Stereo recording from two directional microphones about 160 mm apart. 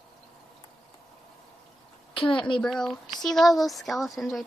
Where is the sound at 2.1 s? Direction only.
30° left (ahead or behind).